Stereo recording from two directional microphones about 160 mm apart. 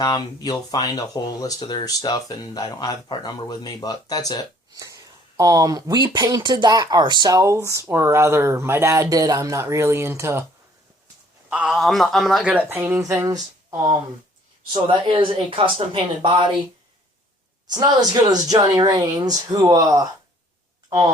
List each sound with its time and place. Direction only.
0.0 s speech: 25° left (ahead or behind)
4.7 s speech: 20° right (ahead or behind)
11.4 s speech: 5° right (ahead or behind)
14.7 s speech: 35° right (ahead or behind)
17.7 s speech: 25° right (ahead or behind)